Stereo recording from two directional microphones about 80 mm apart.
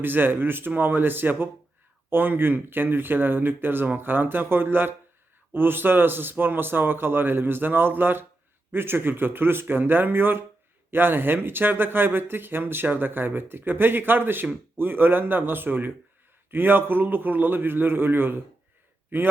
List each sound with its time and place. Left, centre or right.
0.0 s speech: right